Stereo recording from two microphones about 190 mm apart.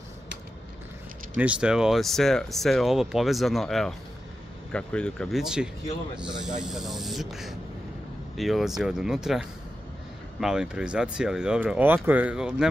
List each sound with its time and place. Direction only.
1.4 s speech: 5° right (ahead or behind)